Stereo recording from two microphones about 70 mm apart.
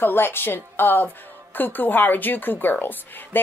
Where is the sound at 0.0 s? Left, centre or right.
Left.